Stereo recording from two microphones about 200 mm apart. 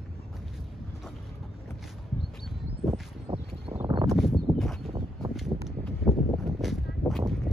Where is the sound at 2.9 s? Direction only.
20° right (ahead or behind).